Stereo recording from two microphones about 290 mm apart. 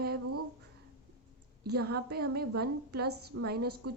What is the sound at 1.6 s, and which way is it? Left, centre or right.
A woman's voice, right.